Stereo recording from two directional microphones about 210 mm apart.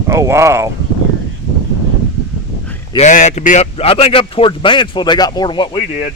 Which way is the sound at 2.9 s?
35° left (ahead or behind).